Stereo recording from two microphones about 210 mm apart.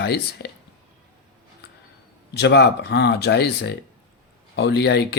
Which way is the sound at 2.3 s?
55° left (ahead or behind).